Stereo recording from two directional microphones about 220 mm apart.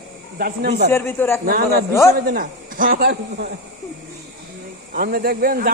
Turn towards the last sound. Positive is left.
turn(degrees=-40)  # may be behind; listen again after turning